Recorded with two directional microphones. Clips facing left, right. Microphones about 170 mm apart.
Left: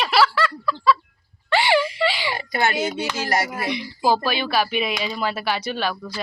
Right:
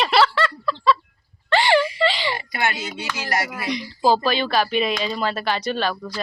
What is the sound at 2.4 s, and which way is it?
Speech, 30° left (ahead or behind).